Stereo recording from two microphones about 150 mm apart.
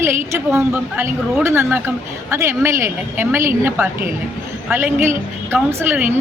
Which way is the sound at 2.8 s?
15° right (ahead or behind).